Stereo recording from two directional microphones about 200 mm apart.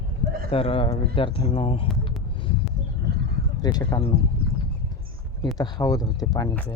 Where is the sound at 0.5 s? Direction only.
30° left (ahead or behind).